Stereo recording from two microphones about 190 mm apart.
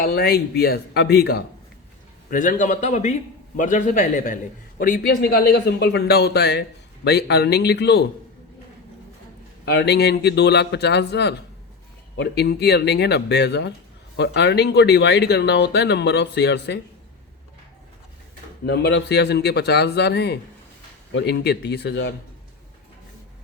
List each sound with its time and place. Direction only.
0.0 s speech: 55° left (ahead or behind)
2.3 s a man's voice: 45° left (ahead or behind); by 8.0 s 60° left (ahead or behind)
9.6 s speech: 60° left (ahead or behind)
18.6 s speech: 65° left (ahead or behind)